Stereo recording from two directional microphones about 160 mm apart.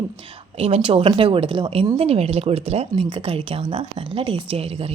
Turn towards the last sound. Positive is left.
turn(degrees=-40)  # may be behind; listen again after turning